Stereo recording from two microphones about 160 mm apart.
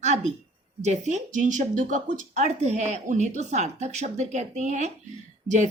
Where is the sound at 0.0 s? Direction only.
45° right (ahead or behind).